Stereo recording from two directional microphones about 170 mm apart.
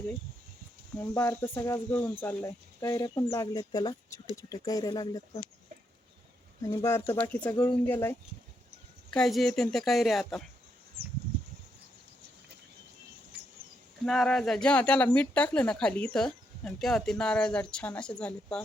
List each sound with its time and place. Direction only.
0.9 s speech: 10° left (ahead or behind)
6.6 s speech: 20° left (ahead or behind)
9.1 s speech: centre (ahead or behind)
14.0 s speech: 5° left (ahead or behind)